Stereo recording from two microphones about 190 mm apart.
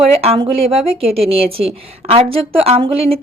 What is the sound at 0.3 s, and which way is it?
Speech, 25° right (ahead or behind).